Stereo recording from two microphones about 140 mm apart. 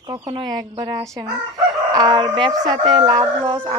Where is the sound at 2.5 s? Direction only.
30° right (ahead or behind).